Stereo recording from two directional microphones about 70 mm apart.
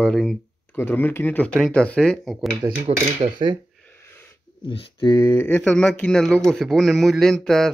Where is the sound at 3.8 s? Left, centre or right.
Left.